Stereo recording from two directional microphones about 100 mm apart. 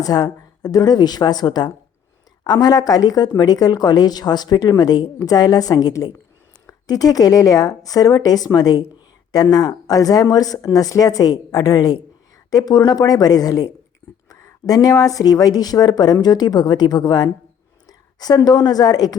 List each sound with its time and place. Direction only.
0.0 s a woman's voice: 40° left (ahead or behind)